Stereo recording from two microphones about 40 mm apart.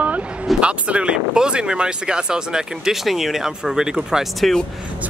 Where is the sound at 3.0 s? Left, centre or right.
Centre.